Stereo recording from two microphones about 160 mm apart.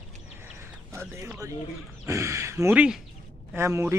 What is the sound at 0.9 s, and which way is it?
A man's voice, 15° right (ahead or behind).